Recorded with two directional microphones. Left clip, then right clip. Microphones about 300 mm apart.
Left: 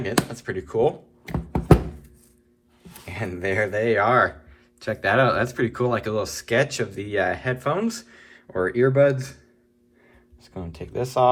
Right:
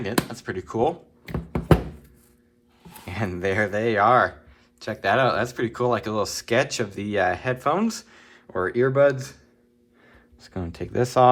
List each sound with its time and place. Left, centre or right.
0.3 s speech: centre
1.2 s knock: centre
3.1 s speech: right
10.4 s speech: right